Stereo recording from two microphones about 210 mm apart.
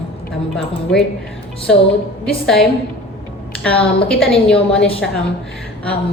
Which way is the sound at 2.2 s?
Centre (ahead or behind).